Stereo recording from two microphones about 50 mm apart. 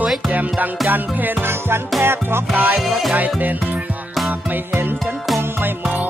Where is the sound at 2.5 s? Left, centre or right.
Right.